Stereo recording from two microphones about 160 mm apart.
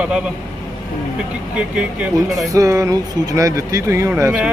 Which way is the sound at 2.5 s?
20° right (ahead or behind).